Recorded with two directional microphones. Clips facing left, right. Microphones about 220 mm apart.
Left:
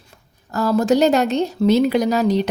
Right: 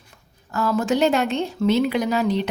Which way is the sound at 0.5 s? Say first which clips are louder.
Left 5 dB; 40° left (ahead or behind).